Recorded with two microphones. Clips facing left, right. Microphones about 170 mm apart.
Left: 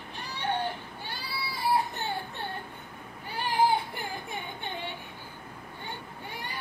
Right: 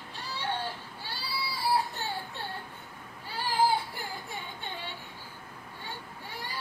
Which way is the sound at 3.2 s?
20° left (ahead or behind).